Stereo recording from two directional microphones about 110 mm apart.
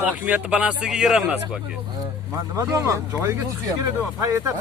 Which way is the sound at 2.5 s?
30° right (ahead or behind).